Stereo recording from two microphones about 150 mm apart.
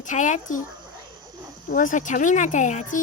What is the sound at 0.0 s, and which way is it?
Speech, 55° left (ahead or behind).